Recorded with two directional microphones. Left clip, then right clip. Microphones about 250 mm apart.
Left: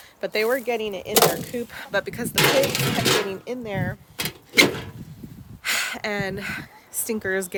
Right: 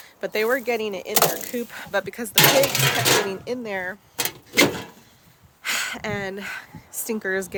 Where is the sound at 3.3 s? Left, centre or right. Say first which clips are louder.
Right 2 dB; centre.